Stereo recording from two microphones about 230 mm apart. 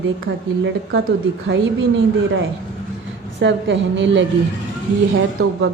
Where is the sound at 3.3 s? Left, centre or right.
Right.